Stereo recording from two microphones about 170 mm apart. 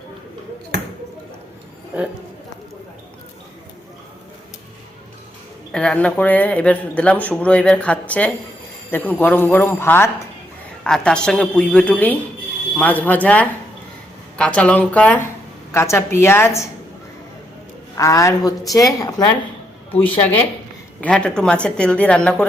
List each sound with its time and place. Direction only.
5.7 s a woman's voice: 5° left (ahead or behind)
17.9 s a woman's voice: 20° left (ahead or behind)
21.0 s a woman's voice: 5° left (ahead or behind)